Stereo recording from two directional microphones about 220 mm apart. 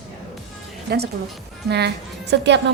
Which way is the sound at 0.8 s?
45° right (ahead or behind).